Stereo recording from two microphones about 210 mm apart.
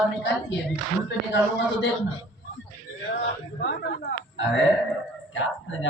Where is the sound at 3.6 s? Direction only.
55° left (ahead or behind).